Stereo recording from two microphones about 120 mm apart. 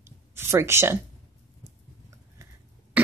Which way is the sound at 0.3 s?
20° right (ahead or behind).